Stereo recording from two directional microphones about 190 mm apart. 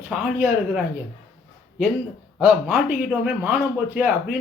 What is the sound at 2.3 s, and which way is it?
A man's voice, centre (ahead or behind).